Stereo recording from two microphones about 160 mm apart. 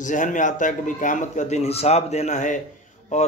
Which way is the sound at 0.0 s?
50° left (ahead or behind).